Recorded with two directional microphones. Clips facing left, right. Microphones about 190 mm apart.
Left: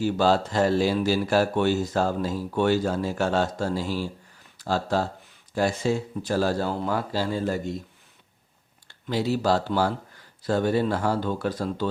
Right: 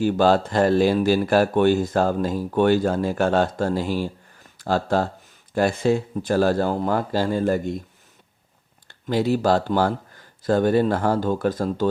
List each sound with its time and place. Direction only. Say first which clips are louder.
0.0 s speech: right 4 dB; 55° right (ahead or behind)
8.9 s speech: right 4 dB; 50° right (ahead or behind)